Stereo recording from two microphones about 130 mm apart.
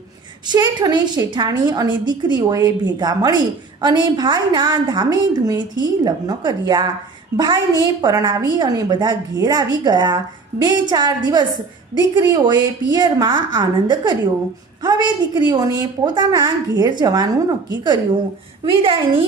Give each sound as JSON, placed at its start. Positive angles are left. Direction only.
{"t": 0.4, "sound": "a woman's voice", "side_deg": -35}